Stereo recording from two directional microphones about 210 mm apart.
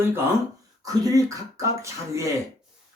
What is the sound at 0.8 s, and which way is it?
Speech, 15° right (ahead or behind).